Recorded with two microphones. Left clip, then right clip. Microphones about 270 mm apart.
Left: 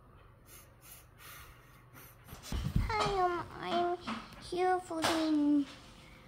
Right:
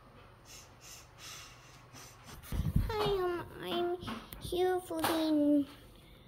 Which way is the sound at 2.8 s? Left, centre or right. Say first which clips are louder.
Left 2 dB; centre.